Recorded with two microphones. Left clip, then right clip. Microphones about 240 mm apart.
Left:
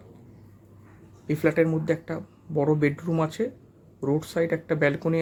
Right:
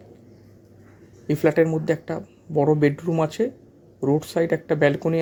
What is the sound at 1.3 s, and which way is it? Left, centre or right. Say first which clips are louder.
A man's voice: right 4 dB; centre.